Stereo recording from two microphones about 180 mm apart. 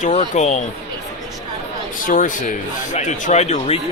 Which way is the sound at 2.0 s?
50° left (ahead or behind).